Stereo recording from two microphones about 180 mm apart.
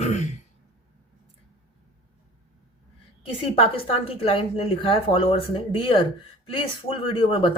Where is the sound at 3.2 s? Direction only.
30° left (ahead or behind).